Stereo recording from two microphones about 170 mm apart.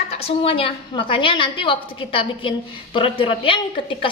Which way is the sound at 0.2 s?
35° left (ahead or behind).